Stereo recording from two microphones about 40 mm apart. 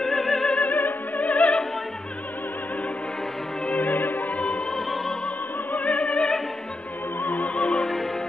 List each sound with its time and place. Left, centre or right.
0.0 s music: centre
0.7 s opera: left
3.6 s music: left
4.7 s opera: centre
5.7 s opera: left
7.2 s music: left
7.5 s music: left
7.8 s music: centre